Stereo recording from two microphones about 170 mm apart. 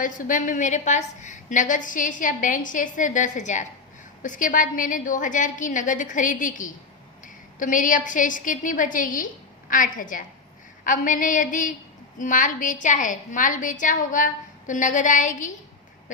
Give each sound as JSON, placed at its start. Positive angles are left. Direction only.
{"t": 0.0, "sound": "a woman's voice", "side_deg": 50}